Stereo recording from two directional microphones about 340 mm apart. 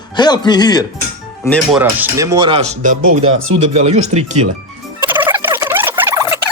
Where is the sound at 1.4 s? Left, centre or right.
Centre; by 3.0 s right.